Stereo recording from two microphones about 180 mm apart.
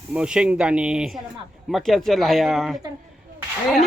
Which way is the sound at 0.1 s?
5° right (ahead or behind).